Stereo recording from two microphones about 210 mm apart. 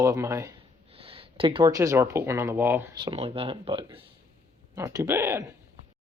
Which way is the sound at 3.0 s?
25° right (ahead or behind).